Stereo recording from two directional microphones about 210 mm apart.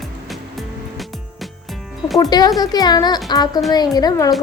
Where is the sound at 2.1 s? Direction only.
20° left (ahead or behind).